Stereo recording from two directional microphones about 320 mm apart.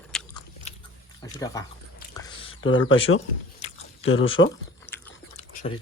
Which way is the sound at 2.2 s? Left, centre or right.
Centre.